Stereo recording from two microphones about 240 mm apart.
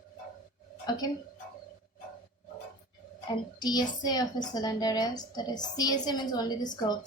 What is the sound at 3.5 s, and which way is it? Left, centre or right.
Speech, centre.